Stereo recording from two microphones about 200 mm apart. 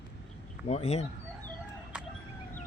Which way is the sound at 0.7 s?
30° left (ahead or behind).